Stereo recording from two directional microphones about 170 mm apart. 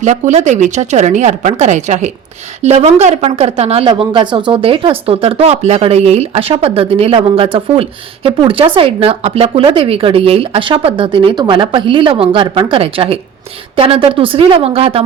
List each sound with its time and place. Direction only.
0.0 s a woman's voice: 45° right (ahead or behind)